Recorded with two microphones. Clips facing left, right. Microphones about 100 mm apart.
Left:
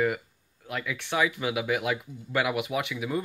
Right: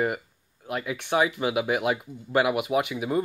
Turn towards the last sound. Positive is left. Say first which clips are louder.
# right 5 dB
turn(degrees=-35)  # may be behind; listen again after turning